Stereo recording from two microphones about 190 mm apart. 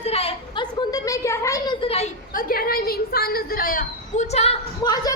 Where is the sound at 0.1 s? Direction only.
30° left (ahead or behind).